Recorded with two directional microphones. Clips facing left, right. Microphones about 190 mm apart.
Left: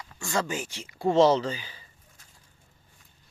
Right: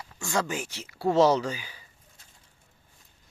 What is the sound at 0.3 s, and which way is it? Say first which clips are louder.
Speech: even; 10° right (ahead or behind).